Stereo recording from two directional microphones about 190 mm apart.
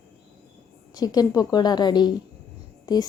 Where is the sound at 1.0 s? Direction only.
20° left (ahead or behind).